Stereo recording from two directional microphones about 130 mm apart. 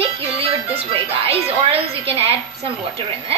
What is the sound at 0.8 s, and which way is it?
A woman's voice, 50° right (ahead or behind).